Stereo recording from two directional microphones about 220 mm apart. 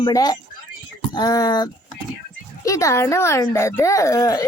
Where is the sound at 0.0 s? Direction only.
15° left (ahead or behind).